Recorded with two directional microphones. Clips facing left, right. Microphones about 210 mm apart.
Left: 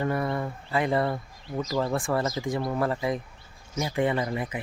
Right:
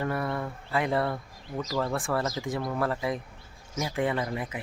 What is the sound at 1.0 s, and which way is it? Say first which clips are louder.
Speech: left 2 dB; 20° left (ahead or behind).